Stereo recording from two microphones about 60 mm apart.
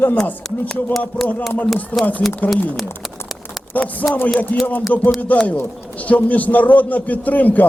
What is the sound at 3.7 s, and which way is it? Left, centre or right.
A man's voice, left.